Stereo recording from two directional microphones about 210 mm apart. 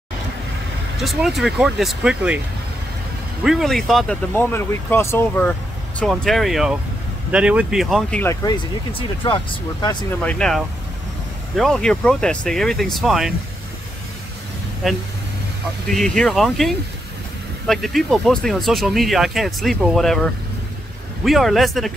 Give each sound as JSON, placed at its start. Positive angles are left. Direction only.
{"t": 0.9, "sound": "speech", "side_deg": 0}
{"t": 3.4, "sound": "speech", "side_deg": 0}
{"t": 8.9, "sound": "speech", "side_deg": 25}
{"t": 10.2, "sound": "speech", "side_deg": 5}
{"t": 14.8, "sound": "speech", "side_deg": 0}